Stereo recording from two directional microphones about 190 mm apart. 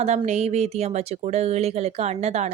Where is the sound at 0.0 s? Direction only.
35° right (ahead or behind).